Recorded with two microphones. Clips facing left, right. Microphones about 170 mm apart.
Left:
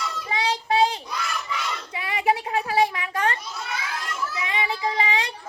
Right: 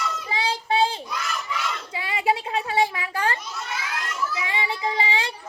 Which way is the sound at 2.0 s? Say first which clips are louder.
Left 1 dB; 25° right (ahead or behind).